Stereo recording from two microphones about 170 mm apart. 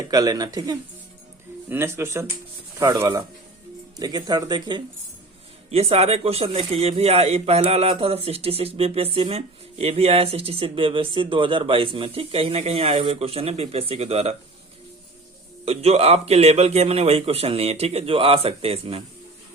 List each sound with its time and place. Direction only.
0.1 s speech: 20° right (ahead or behind)
5.7 s a man's voice: 35° right (ahead or behind)
15.6 s a man's voice: 35° right (ahead or behind)